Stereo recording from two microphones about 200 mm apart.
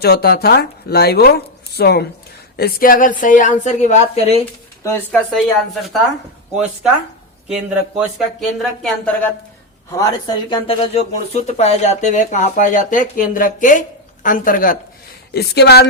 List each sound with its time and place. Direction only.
0.0 s speech: 50° left (ahead or behind); by 4.4 s 35° left (ahead or behind)
4.8 s speech: 15° left (ahead or behind)
5.3 s speech: centre (ahead or behind)
7.9 s speech: centre (ahead or behind)
9.9 s speech: 20° left (ahead or behind); by 14.8 s 45° left (ahead or behind)
15.3 s speech: 55° left (ahead or behind)